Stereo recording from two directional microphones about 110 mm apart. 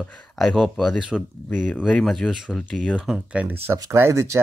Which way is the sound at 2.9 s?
10° right (ahead or behind).